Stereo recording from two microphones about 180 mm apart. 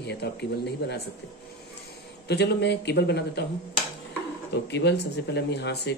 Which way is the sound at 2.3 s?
65° left (ahead or behind).